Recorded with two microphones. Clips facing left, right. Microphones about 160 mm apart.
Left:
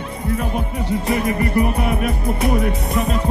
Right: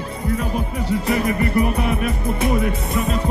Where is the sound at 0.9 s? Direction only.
30° left (ahead or behind).